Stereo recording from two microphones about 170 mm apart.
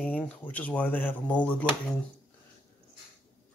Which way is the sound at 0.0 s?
10° left (ahead or behind).